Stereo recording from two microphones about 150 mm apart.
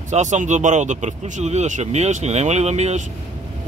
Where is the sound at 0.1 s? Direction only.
55° right (ahead or behind).